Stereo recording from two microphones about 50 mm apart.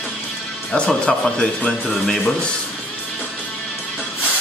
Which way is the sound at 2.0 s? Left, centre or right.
Centre.